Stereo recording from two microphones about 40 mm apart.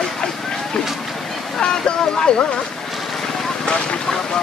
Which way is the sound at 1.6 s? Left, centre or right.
Centre.